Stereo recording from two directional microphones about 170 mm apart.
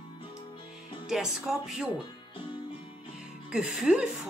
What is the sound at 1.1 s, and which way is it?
Speech, centre (ahead or behind).